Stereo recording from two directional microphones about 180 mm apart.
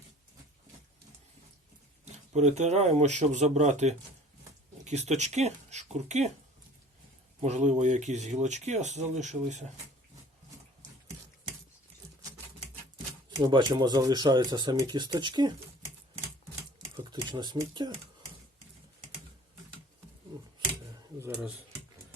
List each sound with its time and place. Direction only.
2.1 s speech: 40° right (ahead or behind)
7.4 s speech: 40° right (ahead or behind)
13.4 s speech: 25° right (ahead or behind)
17.0 s speech: 25° right (ahead or behind)
21.2 s speech: 10° right (ahead or behind)